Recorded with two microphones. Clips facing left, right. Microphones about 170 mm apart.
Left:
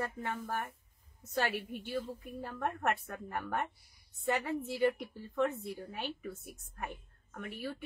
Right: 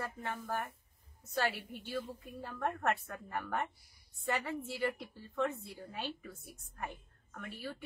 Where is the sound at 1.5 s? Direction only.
20° left (ahead or behind).